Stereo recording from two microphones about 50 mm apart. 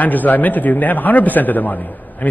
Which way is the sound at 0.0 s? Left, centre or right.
Left.